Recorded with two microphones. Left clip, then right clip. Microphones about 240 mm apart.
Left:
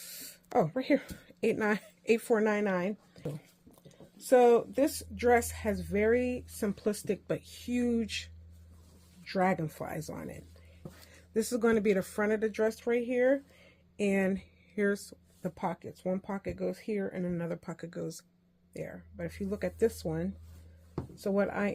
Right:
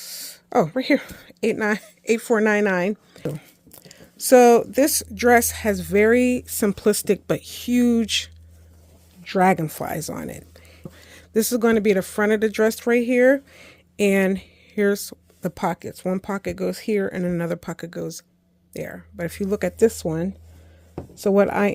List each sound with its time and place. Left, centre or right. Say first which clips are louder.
0.0 s speech: right 11 dB; right
18.7 s speech: right 10 dB; right